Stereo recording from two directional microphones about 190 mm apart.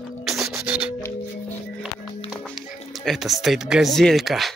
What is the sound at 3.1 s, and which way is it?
Speech, centre (ahead or behind).